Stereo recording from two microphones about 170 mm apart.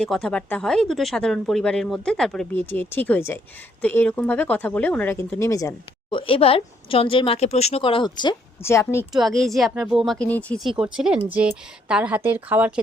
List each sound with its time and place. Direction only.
0.0 s speech: 5° left (ahead or behind)
9.1 s speech: centre (ahead or behind)